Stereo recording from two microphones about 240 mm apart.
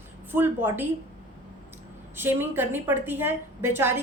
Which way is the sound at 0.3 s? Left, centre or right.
Centre.